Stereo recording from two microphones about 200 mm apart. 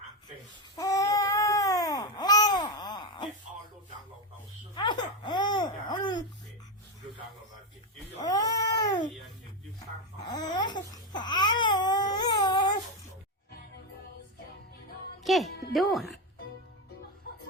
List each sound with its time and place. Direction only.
0.8 s babbling: 15° left (ahead or behind)
4.7 s babbling: 20° left (ahead or behind)
8.2 s cat: 20° left (ahead or behind)
10.2 s babbling: 20° left (ahead or behind)
15.2 s music: centre (ahead or behind)